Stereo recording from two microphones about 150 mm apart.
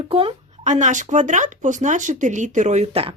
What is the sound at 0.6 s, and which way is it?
Speech, 55° right (ahead or behind).